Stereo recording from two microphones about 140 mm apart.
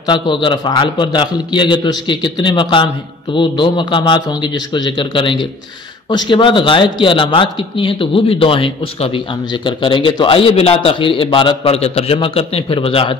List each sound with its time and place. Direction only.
0.0 s a man's voice: 35° left (ahead or behind)